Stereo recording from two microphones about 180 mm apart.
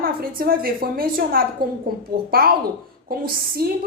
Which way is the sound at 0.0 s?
55° right (ahead or behind).